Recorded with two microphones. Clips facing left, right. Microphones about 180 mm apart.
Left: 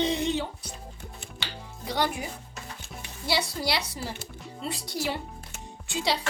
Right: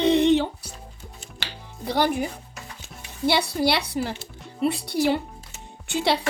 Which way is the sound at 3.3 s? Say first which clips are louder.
Right 7 dB; 60° right (ahead or behind).